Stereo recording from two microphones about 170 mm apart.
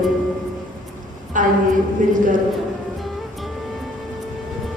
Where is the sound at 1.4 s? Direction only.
50° right (ahead or behind).